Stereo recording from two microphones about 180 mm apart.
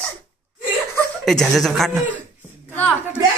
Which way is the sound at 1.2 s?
Centre (ahead or behind).